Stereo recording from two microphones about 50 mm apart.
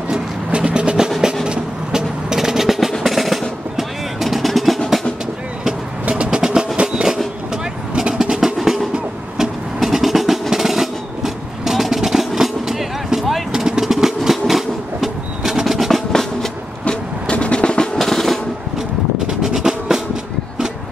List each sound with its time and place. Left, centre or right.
0.1 s a sound: right
1.5 s percussion: centre
6.0 s music: right
6.8 s a sound: centre
7.9 s drum: centre
8.5 s music: centre
9.4 s percussion: centre
12.4 s vehicle: centre
16.8 s music: left
17.9 s drum roll: centre
19.2 s percussion: centre